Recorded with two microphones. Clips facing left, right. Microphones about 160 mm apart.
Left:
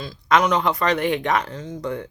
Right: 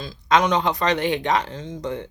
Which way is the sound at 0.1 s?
20° right (ahead or behind).